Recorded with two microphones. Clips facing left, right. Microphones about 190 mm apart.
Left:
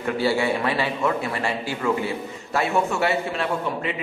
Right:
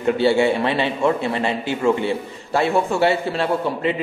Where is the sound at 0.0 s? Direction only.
25° right (ahead or behind).